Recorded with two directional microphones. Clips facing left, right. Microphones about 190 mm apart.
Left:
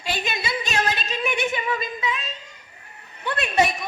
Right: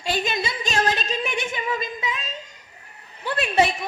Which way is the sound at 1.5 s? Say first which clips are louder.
Left 1 dB; 40° right (ahead or behind).